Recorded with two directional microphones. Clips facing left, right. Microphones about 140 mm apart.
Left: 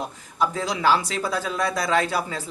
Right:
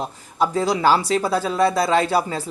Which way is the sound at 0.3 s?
35° right (ahead or behind).